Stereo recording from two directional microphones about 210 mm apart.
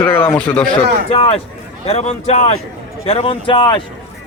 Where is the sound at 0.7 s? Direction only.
25° left (ahead or behind).